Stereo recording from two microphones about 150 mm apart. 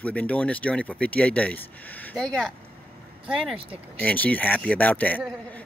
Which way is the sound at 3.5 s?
40° right (ahead or behind).